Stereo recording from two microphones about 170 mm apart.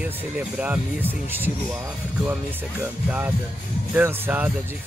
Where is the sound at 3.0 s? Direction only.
10° right (ahead or behind).